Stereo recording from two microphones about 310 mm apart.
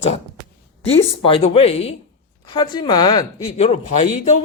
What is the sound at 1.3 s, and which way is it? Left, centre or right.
Speech, centre.